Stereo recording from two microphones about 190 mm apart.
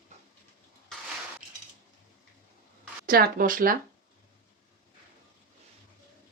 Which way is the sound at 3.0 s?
50° right (ahead or behind).